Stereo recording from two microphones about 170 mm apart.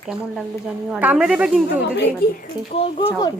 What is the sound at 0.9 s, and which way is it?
Speech, 5° right (ahead or behind).